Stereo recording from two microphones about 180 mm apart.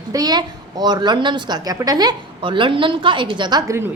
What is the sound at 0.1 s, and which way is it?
A woman's voice, 20° right (ahead or behind).